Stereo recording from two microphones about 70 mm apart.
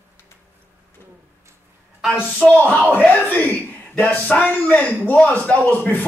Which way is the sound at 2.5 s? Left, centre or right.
Left.